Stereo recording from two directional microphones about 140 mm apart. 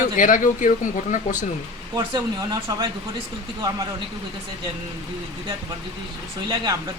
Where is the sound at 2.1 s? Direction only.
25° right (ahead or behind).